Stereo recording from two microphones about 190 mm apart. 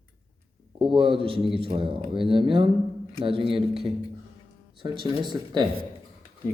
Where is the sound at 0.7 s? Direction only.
25° right (ahead or behind).